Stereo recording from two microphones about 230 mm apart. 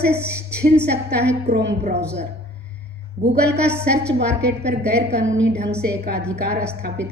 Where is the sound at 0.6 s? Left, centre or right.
Right.